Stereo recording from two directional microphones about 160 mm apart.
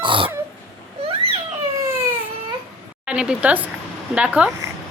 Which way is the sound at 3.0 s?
5° right (ahead or behind).